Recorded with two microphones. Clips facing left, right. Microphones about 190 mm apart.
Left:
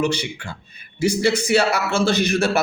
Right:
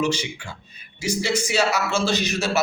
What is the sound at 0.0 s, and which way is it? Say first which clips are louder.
A man's voice: left 2 dB; 60° left (ahead or behind).